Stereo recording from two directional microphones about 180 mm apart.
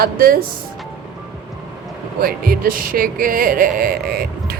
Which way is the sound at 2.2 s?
55° right (ahead or behind).